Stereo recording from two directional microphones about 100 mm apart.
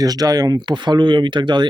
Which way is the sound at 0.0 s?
40° right (ahead or behind).